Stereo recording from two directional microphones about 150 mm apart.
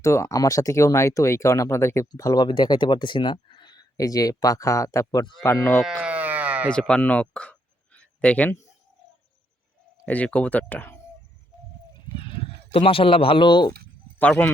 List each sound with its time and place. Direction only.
0.0 s speech: 20° left (ahead or behind)
5.8 s sheep: 5° right (ahead or behind)
6.7 s speech: 5° left (ahead or behind)
10.1 s speech: 10° left (ahead or behind)
12.2 s speech: 40° left (ahead or behind)
14.2 s speech: 10° left (ahead or behind)